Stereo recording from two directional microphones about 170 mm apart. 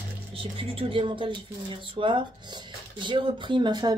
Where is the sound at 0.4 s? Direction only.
30° right (ahead or behind).